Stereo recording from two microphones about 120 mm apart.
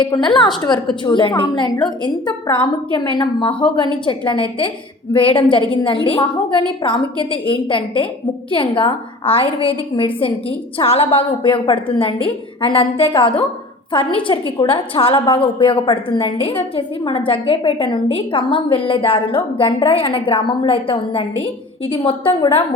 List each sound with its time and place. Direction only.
0.0 s a woman's voice: 40° left (ahead or behind)